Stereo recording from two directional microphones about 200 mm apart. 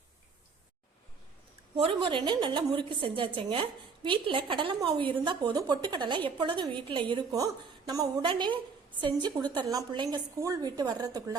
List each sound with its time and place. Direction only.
1.7 s a woman's voice: 25° right (ahead or behind)